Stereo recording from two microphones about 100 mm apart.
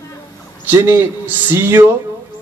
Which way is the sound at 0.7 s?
25° right (ahead or behind).